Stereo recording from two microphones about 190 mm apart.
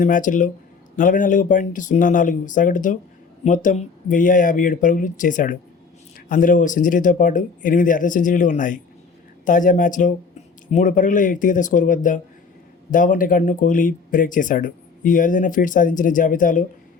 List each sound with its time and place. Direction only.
0.0 s speech: 45° left (ahead or behind)